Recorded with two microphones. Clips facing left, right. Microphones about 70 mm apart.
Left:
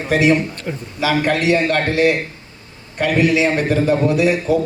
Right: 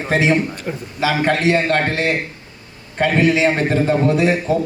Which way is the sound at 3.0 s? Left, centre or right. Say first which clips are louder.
Even; right.